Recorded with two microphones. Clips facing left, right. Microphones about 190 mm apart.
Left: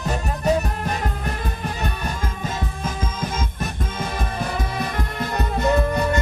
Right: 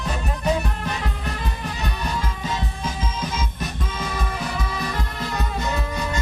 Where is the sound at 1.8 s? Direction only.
50° left (ahead or behind).